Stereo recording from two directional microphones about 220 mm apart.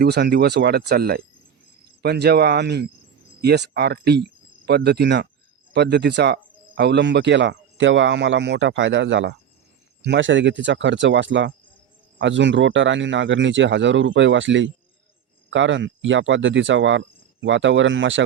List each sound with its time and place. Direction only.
0.0 s speech: 50° right (ahead or behind)